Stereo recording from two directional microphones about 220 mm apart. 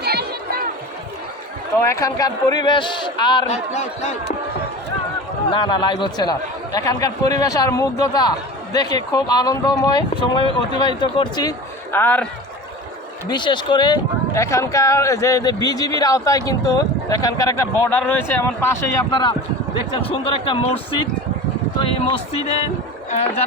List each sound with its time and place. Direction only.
0.0 s splash: 45° right (ahead or behind)
1.8 s a man's voice: 15° left (ahead or behind); by 4.1 s 30° left (ahead or behind)
5.5 s a man's voice: 20° left (ahead or behind)
13.2 s speech: 20° left (ahead or behind)
19.1 s a man's voice: 20° left (ahead or behind)
21.8 s a man's voice: 25° left (ahead or behind)